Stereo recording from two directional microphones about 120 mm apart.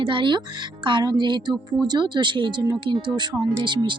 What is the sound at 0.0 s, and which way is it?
Speech, 45° right (ahead or behind).